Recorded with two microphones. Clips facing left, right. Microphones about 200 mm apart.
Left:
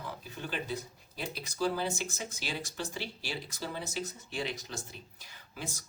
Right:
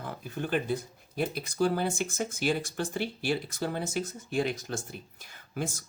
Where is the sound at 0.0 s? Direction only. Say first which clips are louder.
Right 6 dB; 55° right (ahead or behind).